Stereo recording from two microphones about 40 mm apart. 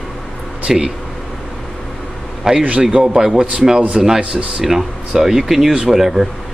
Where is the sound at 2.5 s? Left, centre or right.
Centre.